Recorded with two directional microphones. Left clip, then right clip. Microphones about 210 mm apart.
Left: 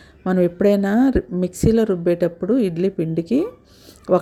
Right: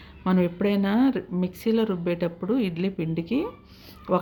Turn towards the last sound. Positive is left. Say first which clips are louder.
# left 7 dB
turn(degrees=25)  # may be behind; listen again after turning